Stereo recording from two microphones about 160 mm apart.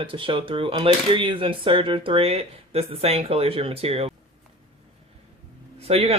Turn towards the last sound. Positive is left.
turn(degrees=-40)  # may be behind; listen again after turning